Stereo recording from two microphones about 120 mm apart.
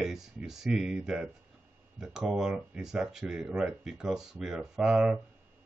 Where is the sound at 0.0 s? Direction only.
5° right (ahead or behind).